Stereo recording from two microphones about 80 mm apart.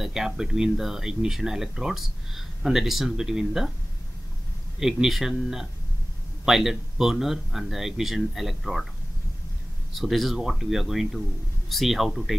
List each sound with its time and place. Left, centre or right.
0.0 s speech: centre
4.7 s speech: centre
9.9 s speech: centre